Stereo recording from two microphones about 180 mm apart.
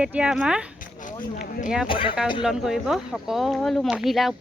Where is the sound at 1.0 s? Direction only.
50° left (ahead or behind).